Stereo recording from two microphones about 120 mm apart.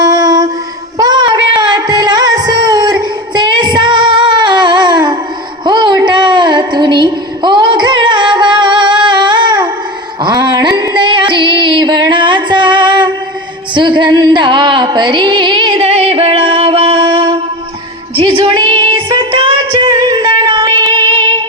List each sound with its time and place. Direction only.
0.0 s a sound: 35° right (ahead or behind)
0.9 s music: 35° right (ahead or behind)
5.6 s a sound: 40° right (ahead or behind)
10.2 s music: 35° right (ahead or behind)
13.7 s carnatic music: 40° right (ahead or behind)
15.8 s music: 60° right (ahead or behind); by 21.4 s 45° right (ahead or behind)